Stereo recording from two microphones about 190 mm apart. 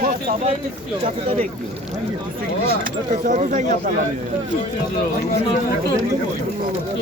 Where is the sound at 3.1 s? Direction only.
40° right (ahead or behind).